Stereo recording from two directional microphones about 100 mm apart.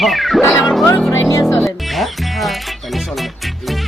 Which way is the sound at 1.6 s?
Centre (ahead or behind).